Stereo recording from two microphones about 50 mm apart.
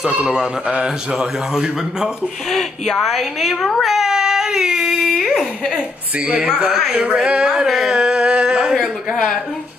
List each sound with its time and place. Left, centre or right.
0.1 s speech: centre
2.5 s speech: centre
3.8 s a sound: centre
6.1 s speech: right
6.5 s speech: centre
6.9 s speech: right
7.2 s speech: centre
7.6 s speech: centre
7.9 s a sound: centre
9.1 s speech: centre